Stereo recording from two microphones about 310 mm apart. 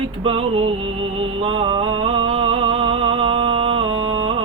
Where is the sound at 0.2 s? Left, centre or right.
Centre.